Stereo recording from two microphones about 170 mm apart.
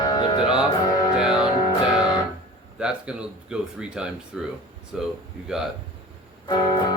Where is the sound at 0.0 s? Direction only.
25° left (ahead or behind).